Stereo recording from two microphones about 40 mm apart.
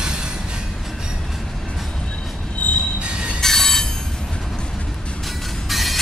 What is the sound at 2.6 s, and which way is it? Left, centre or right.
Train wheels squealing, left.